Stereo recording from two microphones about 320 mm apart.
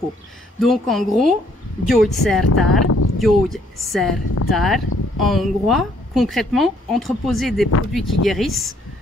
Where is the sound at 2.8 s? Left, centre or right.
Left.